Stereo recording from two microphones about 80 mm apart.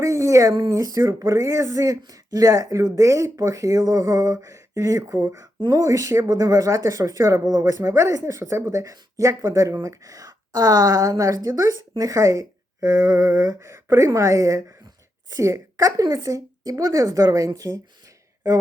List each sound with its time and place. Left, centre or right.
0.0 s speech: right
1.3 s speech: right